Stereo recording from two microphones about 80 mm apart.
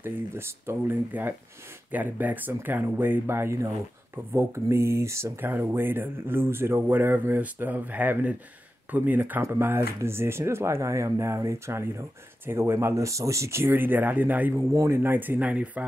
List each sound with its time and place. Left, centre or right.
0.0 s speech: right
5.5 s speech: right
14.5 s speech: right; by 15.8 s centre